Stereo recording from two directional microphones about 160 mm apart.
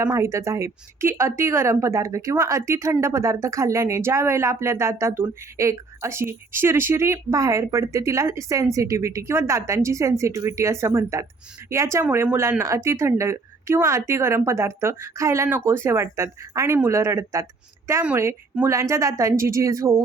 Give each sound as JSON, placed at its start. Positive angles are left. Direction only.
{"t": 0.0, "sound": "speech", "side_deg": -20}